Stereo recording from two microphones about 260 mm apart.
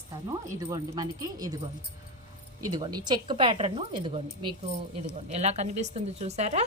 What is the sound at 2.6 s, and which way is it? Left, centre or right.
A woman's voice, centre.